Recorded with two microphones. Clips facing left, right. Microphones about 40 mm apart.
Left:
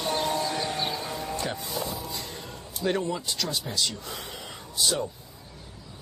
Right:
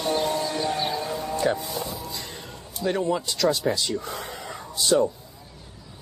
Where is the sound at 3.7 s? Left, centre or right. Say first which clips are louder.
Right 8 dB; right.